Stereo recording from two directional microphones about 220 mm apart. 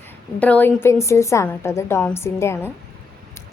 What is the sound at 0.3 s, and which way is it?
A woman's voice, 5° left (ahead or behind).